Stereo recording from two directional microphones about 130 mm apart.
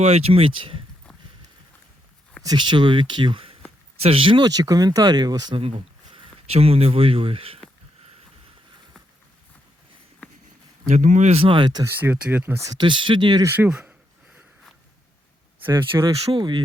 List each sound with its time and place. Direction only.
0.0 s speech: 50° right (ahead or behind)
2.4 s speech: 35° right (ahead or behind)
5.5 s speech: 45° right (ahead or behind)
10.4 s speech: 75° right (ahead or behind); by 11.9 s 35° right (ahead or behind)
11.9 s speech: 15° right (ahead or behind)
12.8 s speech: 40° right (ahead or behind)
13.4 s speech: 20° right (ahead or behind)
13.7 s a sound: 10° right (ahead or behind)
15.9 s speech: 20° right (ahead or behind)
16.3 s speech: 35° right (ahead or behind)